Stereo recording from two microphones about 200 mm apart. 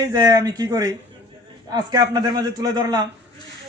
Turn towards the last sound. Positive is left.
turn(degrees=-20)  # may be behind; listen again after turning